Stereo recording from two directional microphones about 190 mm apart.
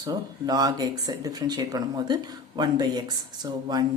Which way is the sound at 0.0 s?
20° right (ahead or behind).